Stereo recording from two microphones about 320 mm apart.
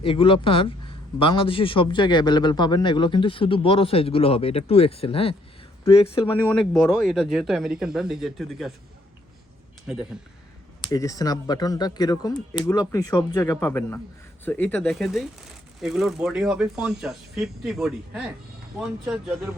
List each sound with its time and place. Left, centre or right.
0.0 s a man's voice: centre
6.5 s speech: centre
9.8 s speech: centre
10.9 s a man's voice: centre